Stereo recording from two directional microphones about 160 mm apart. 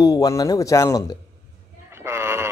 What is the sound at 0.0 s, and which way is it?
Speech, 25° left (ahead or behind).